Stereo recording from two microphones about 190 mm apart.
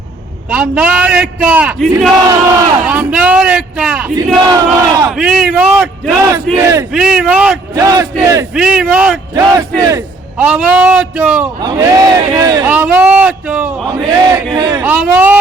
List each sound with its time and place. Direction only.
0.5 s a man's voice: 5° right (ahead or behind)
2.3 s a man's voice: 20° right (ahead or behind)
2.8 s a man's voice: 5° right (ahead or behind)
4.4 s a man's voice: 20° right (ahead or behind)
5.1 s a man's voice: 5° right (ahead or behind)
6.6 s a man's voice: 15° right (ahead or behind)
6.9 s a man's voice: 5° right (ahead or behind)
7.8 s a man's voice: 20° right (ahead or behind)
8.5 s a man's voice: 5° right (ahead or behind)
9.3 s a man's voice: 20° right (ahead or behind)
10.3 s a man's voice: 5° right (ahead or behind)
11.6 s a man's voice: 20° right (ahead or behind)
12.6 s a man's voice: 5° right (ahead or behind)
14.8 s a man's voice: 10° right (ahead or behind)